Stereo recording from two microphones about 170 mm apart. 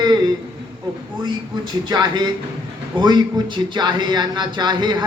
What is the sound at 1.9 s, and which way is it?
Speech, 25° right (ahead or behind).